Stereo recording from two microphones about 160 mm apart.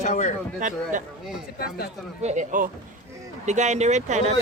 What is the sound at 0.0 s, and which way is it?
Speech, 50° left (ahead or behind).